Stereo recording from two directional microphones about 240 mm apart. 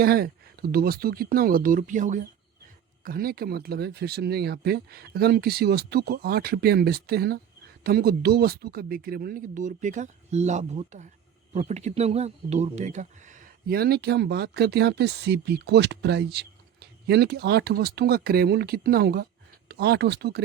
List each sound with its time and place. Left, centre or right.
0.0 s speech: right